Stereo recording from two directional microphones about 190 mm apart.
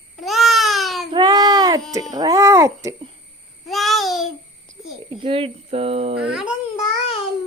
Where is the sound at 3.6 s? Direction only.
Centre (ahead or behind).